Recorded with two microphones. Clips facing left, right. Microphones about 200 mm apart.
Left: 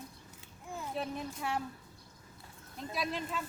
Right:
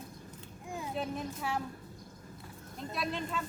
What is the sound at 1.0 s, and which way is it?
Speech, centre (ahead or behind).